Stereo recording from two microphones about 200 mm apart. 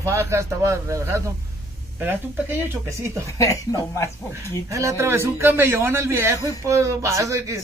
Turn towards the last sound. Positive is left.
turn(degrees=-15)  # may be behind; listen again after turning